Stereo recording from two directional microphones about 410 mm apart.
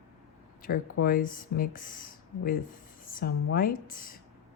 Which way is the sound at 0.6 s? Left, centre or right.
Centre.